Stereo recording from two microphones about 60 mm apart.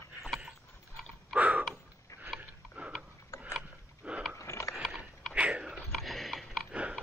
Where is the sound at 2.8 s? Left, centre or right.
Right.